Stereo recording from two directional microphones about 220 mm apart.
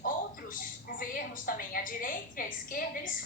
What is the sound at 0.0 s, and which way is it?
A woman's voice, 40° left (ahead or behind).